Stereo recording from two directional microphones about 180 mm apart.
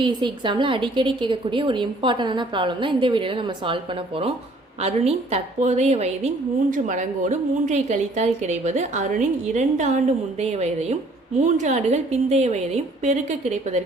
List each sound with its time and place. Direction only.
0.0 s a woman's voice: 25° right (ahead or behind)
4.8 s a woman's voice: 35° right (ahead or behind)